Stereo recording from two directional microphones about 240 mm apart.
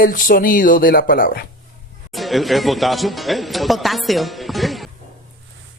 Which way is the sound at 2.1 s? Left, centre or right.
Centre.